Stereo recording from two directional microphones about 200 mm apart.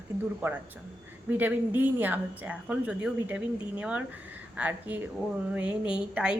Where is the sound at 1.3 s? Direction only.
10° right (ahead or behind).